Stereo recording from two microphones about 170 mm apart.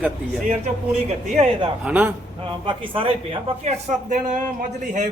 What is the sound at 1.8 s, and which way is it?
Speech, 10° right (ahead or behind).